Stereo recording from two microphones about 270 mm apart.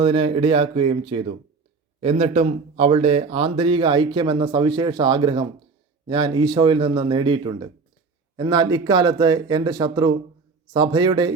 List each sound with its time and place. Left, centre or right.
0.0 s speech: centre